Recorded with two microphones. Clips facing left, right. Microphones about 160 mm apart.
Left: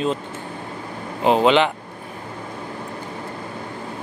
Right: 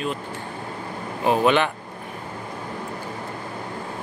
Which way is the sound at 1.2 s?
20° left (ahead or behind).